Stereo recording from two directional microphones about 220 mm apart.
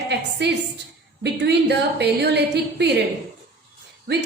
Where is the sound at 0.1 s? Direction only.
50° right (ahead or behind).